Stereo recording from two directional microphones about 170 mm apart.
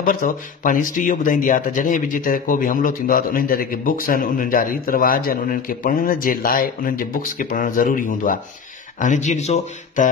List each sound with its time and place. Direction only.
0.0 s speech: 55° left (ahead or behind)